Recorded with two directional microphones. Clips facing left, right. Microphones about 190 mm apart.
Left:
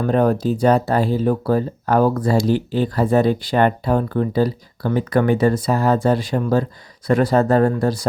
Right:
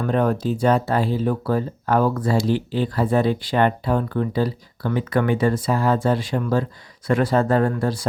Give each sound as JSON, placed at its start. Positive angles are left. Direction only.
{"t": 0.0, "sound": "speech", "side_deg": 40}